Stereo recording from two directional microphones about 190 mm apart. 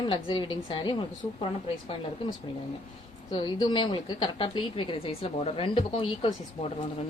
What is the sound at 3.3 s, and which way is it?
A woman's voice, 25° left (ahead or behind).